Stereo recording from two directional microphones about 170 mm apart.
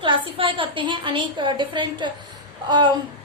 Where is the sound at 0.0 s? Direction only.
30° right (ahead or behind).